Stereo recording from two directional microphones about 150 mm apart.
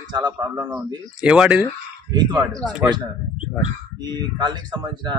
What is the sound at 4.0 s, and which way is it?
Speech, 30° right (ahead or behind).